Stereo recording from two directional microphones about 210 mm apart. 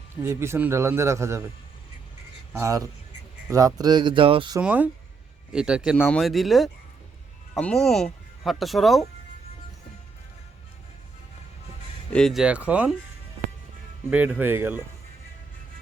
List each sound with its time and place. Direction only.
0.2 s a man's voice: 10° right (ahead or behind)
2.5 s a man's voice: 15° right (ahead or behind)
4.6 s a man's voice: 5° right (ahead or behind)
12.1 s speech: centre (ahead or behind)
14.1 s a man's voice: 5° right (ahead or behind)